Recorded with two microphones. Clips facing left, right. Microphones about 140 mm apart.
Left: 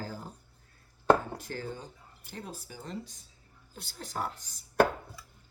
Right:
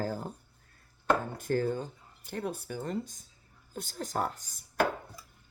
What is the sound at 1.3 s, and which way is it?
Speech, 50° right (ahead or behind).